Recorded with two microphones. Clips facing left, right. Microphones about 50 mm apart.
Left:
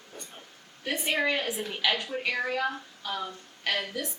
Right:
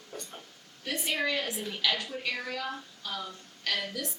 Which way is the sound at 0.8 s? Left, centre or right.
Left.